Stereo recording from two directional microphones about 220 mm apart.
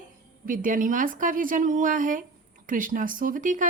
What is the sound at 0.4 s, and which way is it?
Speech, 35° right (ahead or behind).